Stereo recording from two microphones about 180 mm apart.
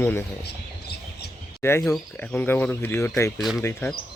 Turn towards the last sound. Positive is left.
turn(degrees=15)  # may be behind; listen again after turning